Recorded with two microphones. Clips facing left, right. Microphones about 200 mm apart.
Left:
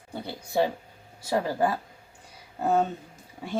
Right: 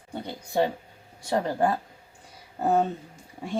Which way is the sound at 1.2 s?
5° left (ahead or behind).